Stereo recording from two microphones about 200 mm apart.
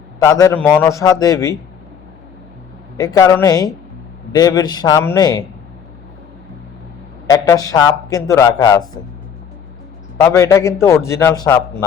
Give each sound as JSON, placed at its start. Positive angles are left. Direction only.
{"t": 0.2, "sound": "a man's voice", "side_deg": 15}
{"t": 3.0, "sound": "a man's voice", "side_deg": 20}
{"t": 7.3, "sound": "a man's voice", "side_deg": 15}
{"t": 10.2, "sound": "a man's voice", "side_deg": 15}